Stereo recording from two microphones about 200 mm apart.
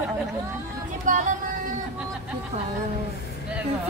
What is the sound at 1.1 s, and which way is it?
Music, 40° right (ahead or behind).